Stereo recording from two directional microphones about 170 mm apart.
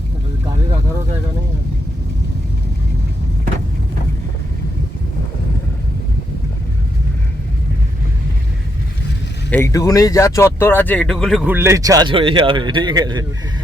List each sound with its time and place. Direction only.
9.5 s speech: 15° left (ahead or behind)
11.4 s a man's voice: 15° right (ahead or behind)